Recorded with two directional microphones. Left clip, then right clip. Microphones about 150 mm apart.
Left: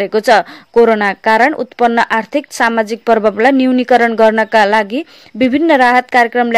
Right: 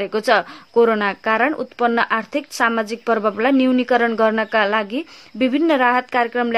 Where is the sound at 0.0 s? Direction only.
30° left (ahead or behind).